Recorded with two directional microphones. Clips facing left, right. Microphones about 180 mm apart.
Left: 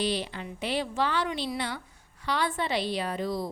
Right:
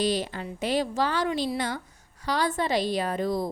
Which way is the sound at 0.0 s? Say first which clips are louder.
Right 3 dB; 45° right (ahead or behind).